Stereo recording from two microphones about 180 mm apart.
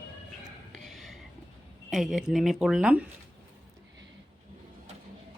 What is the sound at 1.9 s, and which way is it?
Speech, centre (ahead or behind).